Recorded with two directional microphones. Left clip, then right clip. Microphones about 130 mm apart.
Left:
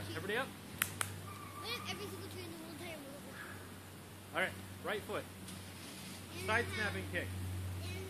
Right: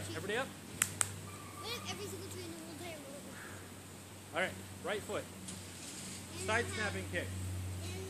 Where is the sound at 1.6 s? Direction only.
15° right (ahead or behind).